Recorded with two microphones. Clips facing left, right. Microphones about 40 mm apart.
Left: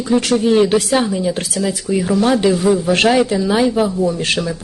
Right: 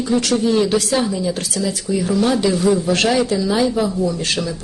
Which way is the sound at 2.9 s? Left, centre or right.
Left.